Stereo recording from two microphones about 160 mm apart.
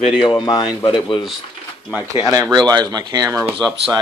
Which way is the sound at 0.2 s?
30° left (ahead or behind).